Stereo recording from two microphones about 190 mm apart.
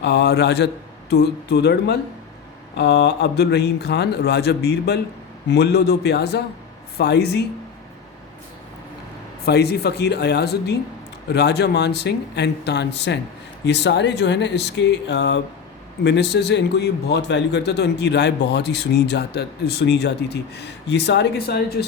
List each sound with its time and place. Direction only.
0.0 s a man's voice: 60° left (ahead or behind)
9.4 s a man's voice: 60° left (ahead or behind)